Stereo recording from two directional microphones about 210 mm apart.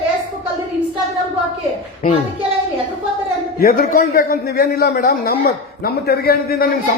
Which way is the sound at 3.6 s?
45° left (ahead or behind).